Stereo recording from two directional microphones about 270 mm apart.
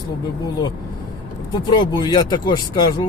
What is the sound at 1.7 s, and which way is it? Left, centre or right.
Speech, centre.